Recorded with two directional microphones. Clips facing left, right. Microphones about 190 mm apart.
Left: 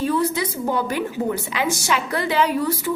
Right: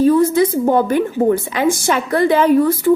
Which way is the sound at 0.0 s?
45° right (ahead or behind).